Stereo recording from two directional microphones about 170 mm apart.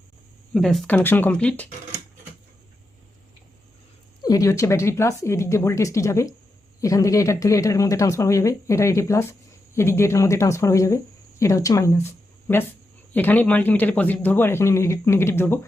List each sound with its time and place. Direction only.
0.5 s a man's voice: centre (ahead or behind)
4.2 s a man's voice: 20° left (ahead or behind)